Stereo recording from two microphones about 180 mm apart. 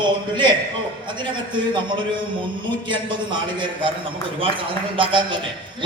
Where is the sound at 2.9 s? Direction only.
25° right (ahead or behind).